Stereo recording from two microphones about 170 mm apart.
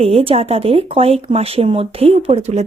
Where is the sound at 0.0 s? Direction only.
35° right (ahead or behind).